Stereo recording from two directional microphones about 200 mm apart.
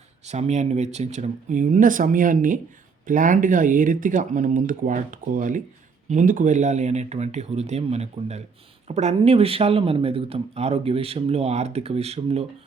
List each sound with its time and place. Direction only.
0.3 s speech: 35° right (ahead or behind)